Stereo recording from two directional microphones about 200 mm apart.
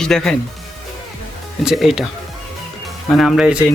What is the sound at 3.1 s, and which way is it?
Speech, centre (ahead or behind).